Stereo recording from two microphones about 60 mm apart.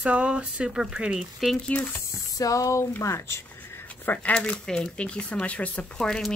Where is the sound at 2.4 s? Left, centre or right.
Left.